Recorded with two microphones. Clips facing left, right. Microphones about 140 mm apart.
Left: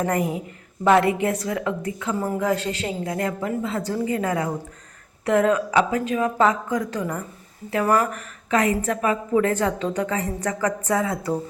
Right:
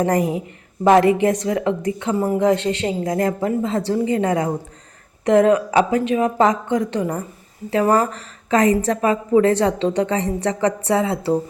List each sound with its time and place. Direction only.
0.0 s a woman's voice: 25° right (ahead or behind)